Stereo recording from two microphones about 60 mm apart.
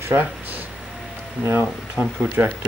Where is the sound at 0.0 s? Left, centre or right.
Right.